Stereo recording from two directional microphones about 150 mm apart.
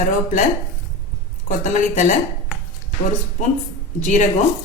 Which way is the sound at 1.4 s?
55° left (ahead or behind).